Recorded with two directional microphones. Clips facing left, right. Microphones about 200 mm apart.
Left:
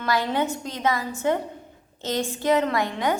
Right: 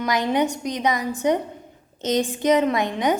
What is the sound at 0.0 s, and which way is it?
A woman's voice, 15° right (ahead or behind).